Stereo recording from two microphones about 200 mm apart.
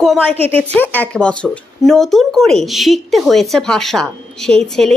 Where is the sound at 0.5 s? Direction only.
10° left (ahead or behind).